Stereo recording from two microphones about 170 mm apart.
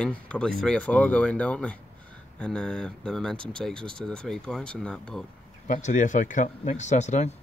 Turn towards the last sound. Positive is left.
turn(degrees=40)  # may be behind; listen again after turning